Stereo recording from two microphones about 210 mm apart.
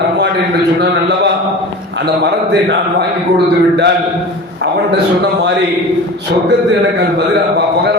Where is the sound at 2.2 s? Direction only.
55° right (ahead or behind).